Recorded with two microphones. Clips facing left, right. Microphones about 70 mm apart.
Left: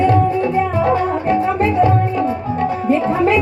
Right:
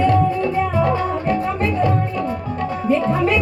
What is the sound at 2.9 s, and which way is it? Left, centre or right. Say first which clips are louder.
Music: left 2 dB; centre.